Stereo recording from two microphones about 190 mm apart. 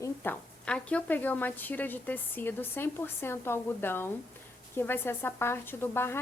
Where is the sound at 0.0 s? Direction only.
10° left (ahead or behind).